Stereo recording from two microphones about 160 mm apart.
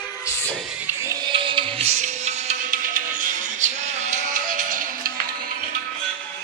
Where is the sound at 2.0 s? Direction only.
45° right (ahead or behind).